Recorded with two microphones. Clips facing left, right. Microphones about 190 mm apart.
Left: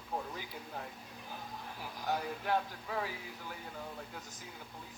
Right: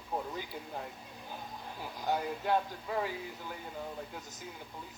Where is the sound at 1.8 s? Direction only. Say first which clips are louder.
Right 3 dB; 20° right (ahead or behind).